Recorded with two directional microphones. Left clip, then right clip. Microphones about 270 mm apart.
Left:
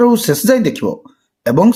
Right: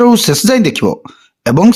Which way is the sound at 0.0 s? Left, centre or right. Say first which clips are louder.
Right 3 dB; right.